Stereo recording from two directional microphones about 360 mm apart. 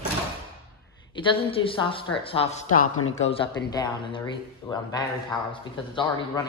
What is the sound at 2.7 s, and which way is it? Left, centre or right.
Speech, left.